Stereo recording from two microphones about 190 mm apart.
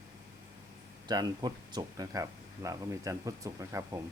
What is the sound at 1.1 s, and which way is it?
Speech, 20° right (ahead or behind).